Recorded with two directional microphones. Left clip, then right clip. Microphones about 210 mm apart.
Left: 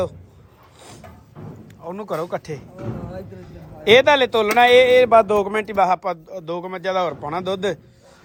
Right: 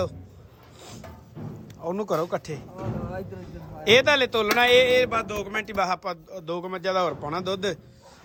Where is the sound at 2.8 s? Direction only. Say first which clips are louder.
Left 1 dB; 50° right (ahead or behind).